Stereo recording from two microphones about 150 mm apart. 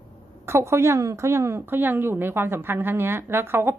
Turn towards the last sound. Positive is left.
turn(degrees=-15)  # may be behind; listen again after turning